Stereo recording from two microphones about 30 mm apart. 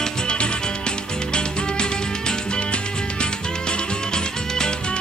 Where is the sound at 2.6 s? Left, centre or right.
Left.